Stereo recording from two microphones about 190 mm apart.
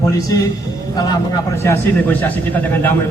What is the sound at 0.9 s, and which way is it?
A man's voice, 15° left (ahead or behind).